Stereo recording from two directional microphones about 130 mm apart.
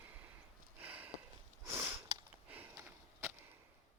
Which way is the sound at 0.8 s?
15° right (ahead or behind).